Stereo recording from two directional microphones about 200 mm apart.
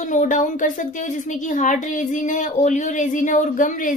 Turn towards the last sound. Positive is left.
turn(degrees=40)  # may be behind; listen again after turning